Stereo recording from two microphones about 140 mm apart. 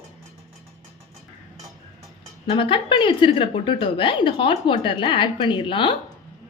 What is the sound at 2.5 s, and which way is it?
A woman's voice, 40° left (ahead or behind).